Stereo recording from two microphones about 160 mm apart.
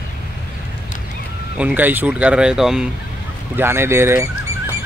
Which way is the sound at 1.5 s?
10° right (ahead or behind).